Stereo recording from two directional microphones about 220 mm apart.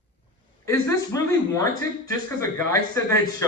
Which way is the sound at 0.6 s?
15° left (ahead or behind).